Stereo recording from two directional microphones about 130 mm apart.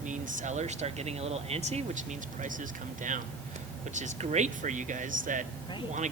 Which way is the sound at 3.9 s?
65° right (ahead or behind).